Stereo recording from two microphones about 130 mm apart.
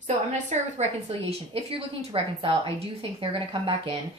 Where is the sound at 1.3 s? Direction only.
45° right (ahead or behind).